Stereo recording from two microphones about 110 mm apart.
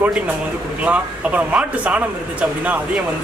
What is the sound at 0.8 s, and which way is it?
Speech, 10° right (ahead or behind).